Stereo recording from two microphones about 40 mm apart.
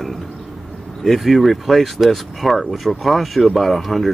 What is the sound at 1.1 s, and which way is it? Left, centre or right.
Speech, centre.